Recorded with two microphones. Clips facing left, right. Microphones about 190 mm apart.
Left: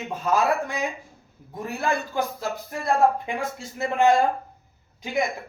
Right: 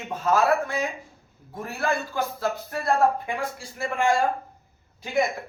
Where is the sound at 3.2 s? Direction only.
20° left (ahead or behind).